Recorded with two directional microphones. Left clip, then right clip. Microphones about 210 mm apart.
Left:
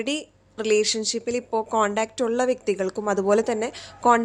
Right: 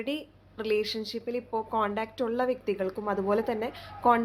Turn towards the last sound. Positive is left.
turn(degrees=25)  # may be behind; listen again after turning